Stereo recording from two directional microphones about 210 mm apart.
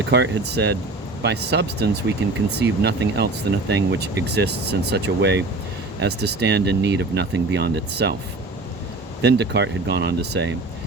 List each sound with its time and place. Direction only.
0.0 s speech: 50° right (ahead or behind)
9.2 s speech: 55° right (ahead or behind)